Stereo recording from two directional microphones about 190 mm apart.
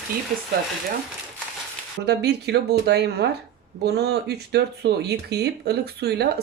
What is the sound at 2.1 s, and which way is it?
Speech, 60° right (ahead or behind).